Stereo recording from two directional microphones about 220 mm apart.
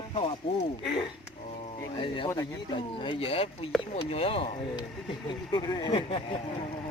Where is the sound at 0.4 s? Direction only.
25° left (ahead or behind).